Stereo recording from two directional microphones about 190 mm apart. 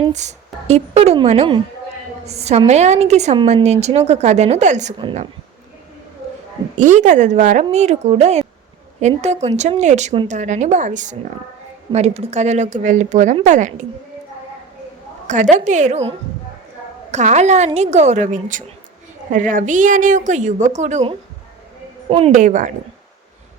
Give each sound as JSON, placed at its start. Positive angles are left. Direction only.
{"t": 0.1, "sound": "a woman's voice", "side_deg": -35}
{"t": 6.7, "sound": "a woman's voice", "side_deg": -40}
{"t": 15.3, "sound": "a woman's voice", "side_deg": -40}
{"t": 22.3, "sound": "a woman's voice", "side_deg": -45}